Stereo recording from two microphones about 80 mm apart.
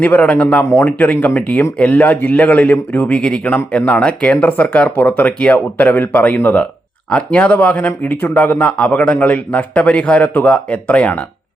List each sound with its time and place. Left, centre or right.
0.0 s speech: centre